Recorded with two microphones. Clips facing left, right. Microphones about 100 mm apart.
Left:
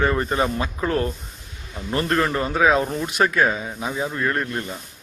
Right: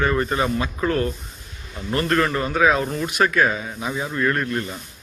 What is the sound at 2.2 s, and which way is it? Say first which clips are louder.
A man's voice: even; 20° left (ahead or behind).